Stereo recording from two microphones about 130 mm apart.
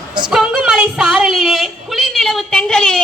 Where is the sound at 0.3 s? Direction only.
5° right (ahead or behind).